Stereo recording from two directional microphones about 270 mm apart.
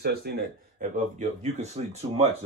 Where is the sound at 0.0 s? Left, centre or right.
Right.